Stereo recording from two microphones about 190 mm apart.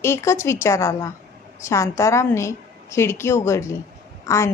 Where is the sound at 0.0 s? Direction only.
15° left (ahead or behind).